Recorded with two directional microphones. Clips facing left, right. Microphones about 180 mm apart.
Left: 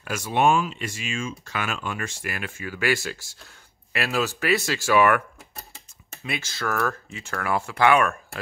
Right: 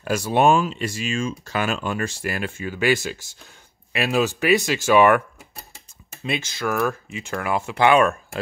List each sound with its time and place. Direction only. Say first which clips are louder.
0.0 s speech: right 4 dB; 35° right (ahead or behind)
6.2 s speech: right 4 dB; 20° right (ahead or behind)